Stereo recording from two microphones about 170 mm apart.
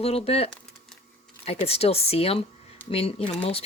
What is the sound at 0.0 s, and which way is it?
Speech, 35° left (ahead or behind).